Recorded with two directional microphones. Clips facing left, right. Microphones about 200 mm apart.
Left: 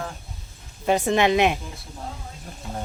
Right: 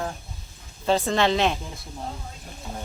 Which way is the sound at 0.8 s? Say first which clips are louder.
Left 2 dB; 15° left (ahead or behind).